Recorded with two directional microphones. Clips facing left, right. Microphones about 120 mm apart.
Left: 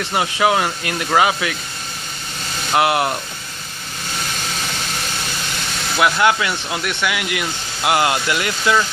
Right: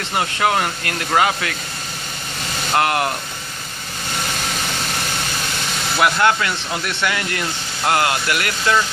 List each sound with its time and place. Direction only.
0.1 s speech: 15° left (ahead or behind)
2.7 s speech: 15° left (ahead or behind)
6.0 s speech: 10° left (ahead or behind)
7.9 s speech: 20° left (ahead or behind)